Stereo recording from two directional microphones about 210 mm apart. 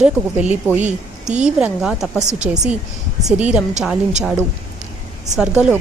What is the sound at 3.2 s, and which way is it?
Speech, 5° right (ahead or behind).